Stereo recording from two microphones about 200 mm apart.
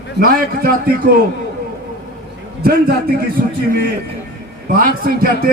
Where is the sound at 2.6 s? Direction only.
50° right (ahead or behind).